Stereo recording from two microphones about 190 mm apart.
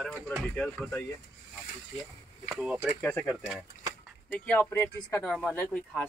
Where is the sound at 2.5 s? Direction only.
Centre (ahead or behind).